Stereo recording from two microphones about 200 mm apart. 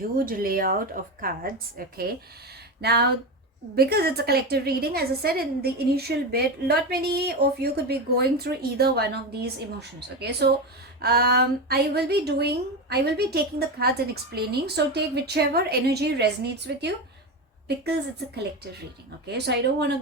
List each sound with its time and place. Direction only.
0.2 s a woman's voice: 45° right (ahead or behind)
2.8 s a woman's voice: 55° right (ahead or behind)
19.3 s speech: 55° right (ahead or behind)